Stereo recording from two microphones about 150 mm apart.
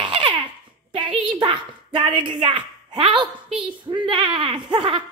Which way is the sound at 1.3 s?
35° right (ahead or behind).